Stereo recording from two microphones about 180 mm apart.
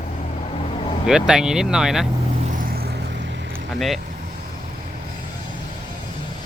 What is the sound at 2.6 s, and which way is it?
Vehicle, 55° right (ahead or behind).